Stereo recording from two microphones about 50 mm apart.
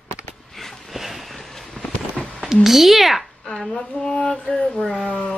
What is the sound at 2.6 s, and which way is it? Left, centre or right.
Speech, centre.